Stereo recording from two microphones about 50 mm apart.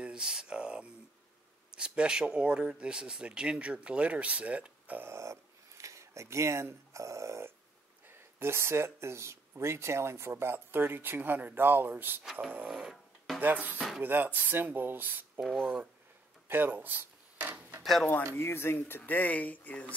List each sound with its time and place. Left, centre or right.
0.0 s a sound: centre
1.7 s speech: centre
5.0 s speech: right
8.1 s speech: right
12.2 s speech: centre
13.4 s speech: right
13.7 s speech: centre
14.0 s speech: right
15.6 s speech: right
16.4 s mechanisms: right
18.3 s speech: left